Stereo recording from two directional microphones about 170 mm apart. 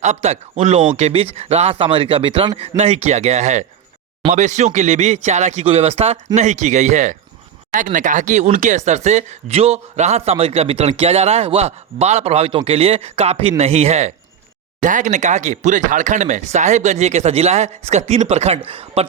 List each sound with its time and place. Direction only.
0.0 s a man's voice: 40° right (ahead or behind)